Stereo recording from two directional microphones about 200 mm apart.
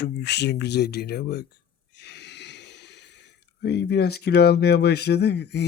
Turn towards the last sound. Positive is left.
turn(degrees=55)  # may be behind; listen again after turning